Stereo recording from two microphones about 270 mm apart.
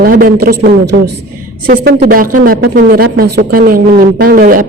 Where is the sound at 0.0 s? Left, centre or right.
Right.